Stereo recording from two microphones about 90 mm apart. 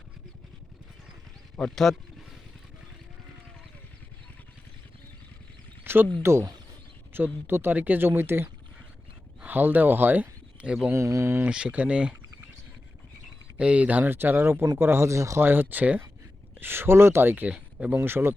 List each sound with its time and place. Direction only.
1.5 s a sound: 5° left (ahead or behind)
5.8 s a sound: 25° right (ahead or behind)
6.2 s speech: 30° right (ahead or behind); by 10.9 s 10° right (ahead or behind)
10.9 s speech: 35° right (ahead or behind)
11.4 s speech: 10° right (ahead or behind)
13.6 s speech: 15° right (ahead or behind); by 15.4 s 35° right (ahead or behind)
15.4 s speech: 25° right (ahead or behind)